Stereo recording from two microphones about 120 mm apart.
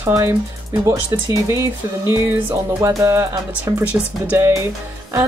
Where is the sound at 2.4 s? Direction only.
20° right (ahead or behind).